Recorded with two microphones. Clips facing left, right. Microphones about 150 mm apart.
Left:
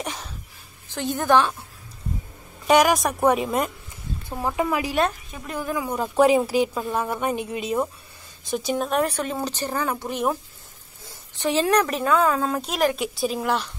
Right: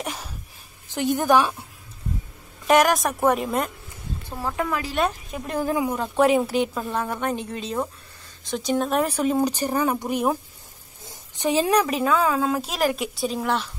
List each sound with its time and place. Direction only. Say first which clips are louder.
0.0 s a sound: even; 5° right (ahead or behind)
0.8 s speech: right 2 dB; 15° right (ahead or behind)
2.6 s a woman's voice: even; centre (ahead or behind)
4.3 s a woman's voice: left 2 dB; 15° left (ahead or behind)
5.5 s speech: right 4 dB; 35° right (ahead or behind)
5.9 s a woman's voice: left 3 dB; centre (ahead or behind)